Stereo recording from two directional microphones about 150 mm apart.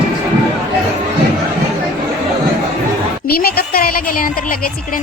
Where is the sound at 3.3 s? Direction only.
90° left.